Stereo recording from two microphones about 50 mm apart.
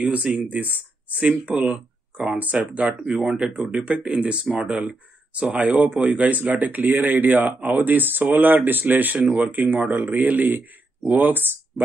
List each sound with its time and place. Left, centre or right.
0.1 s speech: right
2.9 s speech: centre; by 11.8 s right